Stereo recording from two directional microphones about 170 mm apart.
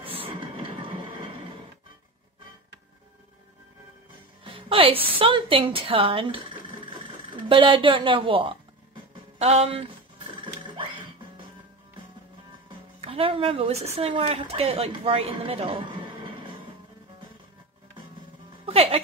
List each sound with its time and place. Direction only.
0.0 s train: 30° right (ahead or behind)
4.5 s music: 30° right (ahead or behind)
5.2 s speech: 30° right (ahead or behind)
10.4 s music: 30° right (ahead or behind)
13.0 s a woman's voice: 35° right (ahead or behind)
18.7 s speech: 35° right (ahead or behind)